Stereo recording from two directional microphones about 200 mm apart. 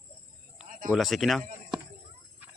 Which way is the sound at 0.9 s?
Centre (ahead or behind).